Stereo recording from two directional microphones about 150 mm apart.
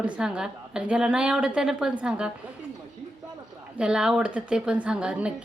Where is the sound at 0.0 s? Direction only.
5° right (ahead or behind).